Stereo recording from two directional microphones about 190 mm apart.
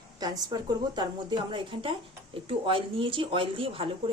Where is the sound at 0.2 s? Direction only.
20° right (ahead or behind).